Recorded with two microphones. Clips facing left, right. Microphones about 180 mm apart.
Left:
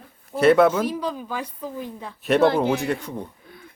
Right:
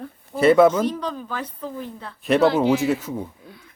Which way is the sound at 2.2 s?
Centre (ahead or behind).